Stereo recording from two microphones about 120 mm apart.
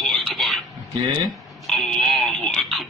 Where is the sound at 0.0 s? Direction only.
Centre (ahead or behind).